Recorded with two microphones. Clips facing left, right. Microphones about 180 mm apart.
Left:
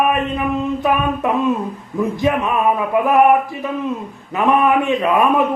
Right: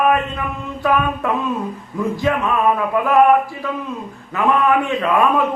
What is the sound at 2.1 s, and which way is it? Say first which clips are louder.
A man's voice: even; 20° left (ahead or behind).